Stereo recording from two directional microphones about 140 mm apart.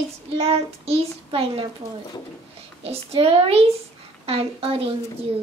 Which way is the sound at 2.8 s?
45° right (ahead or behind).